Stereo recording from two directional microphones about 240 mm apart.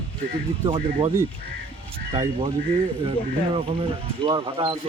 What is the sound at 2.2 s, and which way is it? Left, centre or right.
Speech, right.